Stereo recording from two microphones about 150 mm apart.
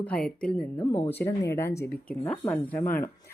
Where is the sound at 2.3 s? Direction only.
10° left (ahead or behind).